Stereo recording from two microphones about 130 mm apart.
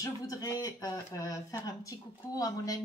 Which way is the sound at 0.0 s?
30° left (ahead or behind).